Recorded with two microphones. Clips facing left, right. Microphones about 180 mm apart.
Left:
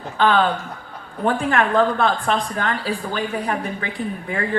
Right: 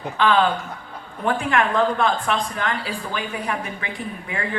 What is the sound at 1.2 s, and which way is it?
Speech, 35° left (ahead or behind).